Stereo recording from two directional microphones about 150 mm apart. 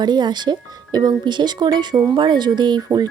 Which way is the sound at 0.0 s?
30° right (ahead or behind).